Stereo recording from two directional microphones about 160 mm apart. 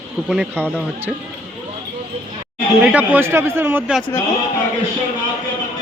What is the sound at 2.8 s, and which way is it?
A man's voice, 10° right (ahead or behind).